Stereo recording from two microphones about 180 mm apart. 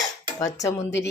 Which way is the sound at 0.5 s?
15° left (ahead or behind).